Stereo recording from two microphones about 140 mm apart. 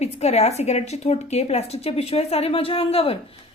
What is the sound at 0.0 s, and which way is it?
A woman's voice, 50° left (ahead or behind).